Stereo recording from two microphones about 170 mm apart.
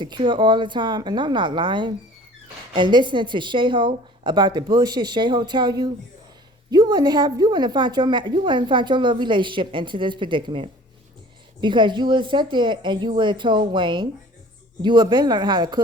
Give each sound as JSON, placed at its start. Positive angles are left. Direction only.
{"t": 0.0, "sound": "a woman's voice", "side_deg": -30}